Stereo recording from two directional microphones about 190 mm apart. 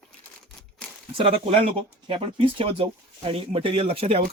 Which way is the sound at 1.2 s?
30° right (ahead or behind).